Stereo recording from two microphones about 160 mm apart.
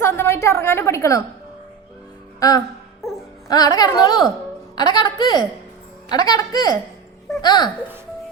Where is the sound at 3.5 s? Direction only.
25° left (ahead or behind).